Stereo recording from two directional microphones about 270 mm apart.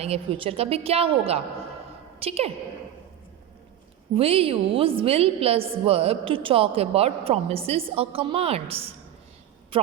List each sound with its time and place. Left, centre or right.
0.0 s a woman's voice: right
4.1 s a woman's voice: right
9.7 s a sound: centre